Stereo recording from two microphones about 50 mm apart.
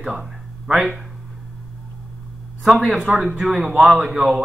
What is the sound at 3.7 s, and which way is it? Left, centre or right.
Speech, centre.